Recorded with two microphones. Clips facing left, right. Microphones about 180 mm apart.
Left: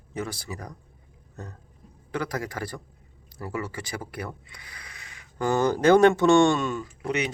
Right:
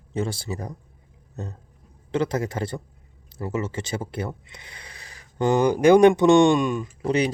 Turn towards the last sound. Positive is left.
turn(degrees=-35)  # may be behind; listen again after turning